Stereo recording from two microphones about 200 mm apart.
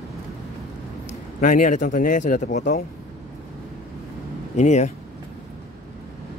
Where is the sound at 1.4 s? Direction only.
40° left (ahead or behind).